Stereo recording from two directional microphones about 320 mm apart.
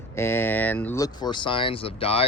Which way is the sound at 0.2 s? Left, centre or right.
Centre.